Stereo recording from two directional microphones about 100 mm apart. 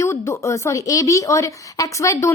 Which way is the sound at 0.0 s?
25° left (ahead or behind).